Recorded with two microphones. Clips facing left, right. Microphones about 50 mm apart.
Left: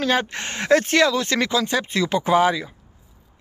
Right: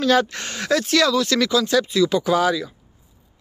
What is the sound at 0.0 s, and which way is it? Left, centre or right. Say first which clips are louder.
Speech: right 3 dB; left.